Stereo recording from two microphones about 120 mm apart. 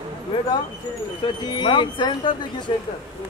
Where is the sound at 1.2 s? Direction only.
40° left (ahead or behind).